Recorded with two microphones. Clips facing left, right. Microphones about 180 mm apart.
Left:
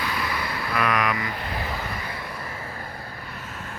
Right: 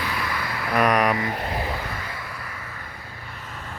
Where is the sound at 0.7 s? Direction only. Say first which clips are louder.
Right 5 dB; 40° right (ahead or behind).